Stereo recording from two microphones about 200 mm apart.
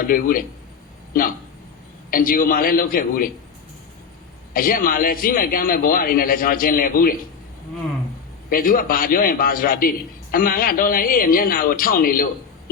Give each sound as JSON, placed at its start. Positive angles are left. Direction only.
{"t": 0.0, "sound": "a man's voice", "side_deg": 45}
{"t": 4.5, "sound": "a man's voice", "side_deg": 45}
{"t": 8.4, "sound": "a man's voice", "side_deg": 45}